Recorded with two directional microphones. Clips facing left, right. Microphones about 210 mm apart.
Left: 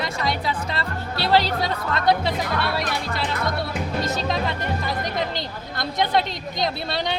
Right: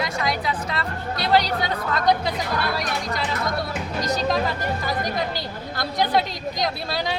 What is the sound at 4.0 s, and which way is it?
Speech, 25° left (ahead or behind).